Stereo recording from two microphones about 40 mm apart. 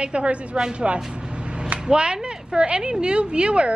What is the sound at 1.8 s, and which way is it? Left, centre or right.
Speech, right.